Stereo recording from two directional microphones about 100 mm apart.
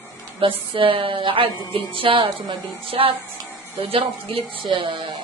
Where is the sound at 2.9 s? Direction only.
65° right (ahead or behind).